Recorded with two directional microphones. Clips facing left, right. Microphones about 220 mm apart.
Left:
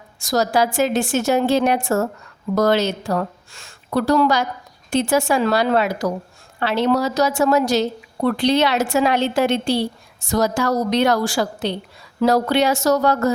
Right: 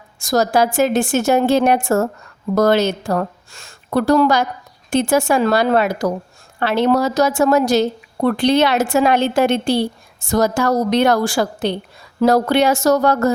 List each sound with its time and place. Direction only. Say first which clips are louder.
0.2 s a woman's voice: right 3 dB; 50° right (ahead or behind)